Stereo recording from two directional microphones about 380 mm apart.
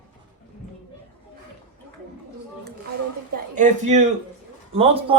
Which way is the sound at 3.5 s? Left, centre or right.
Centre.